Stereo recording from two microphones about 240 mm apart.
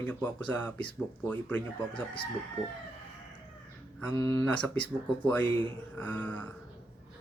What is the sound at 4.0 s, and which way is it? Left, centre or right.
Speech, centre.